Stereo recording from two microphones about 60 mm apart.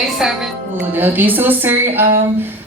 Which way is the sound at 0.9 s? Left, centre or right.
Right.